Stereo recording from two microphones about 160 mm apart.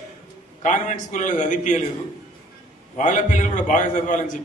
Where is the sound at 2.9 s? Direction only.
50° left (ahead or behind).